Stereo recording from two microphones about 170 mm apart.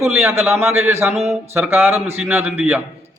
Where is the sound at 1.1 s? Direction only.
40° right (ahead or behind).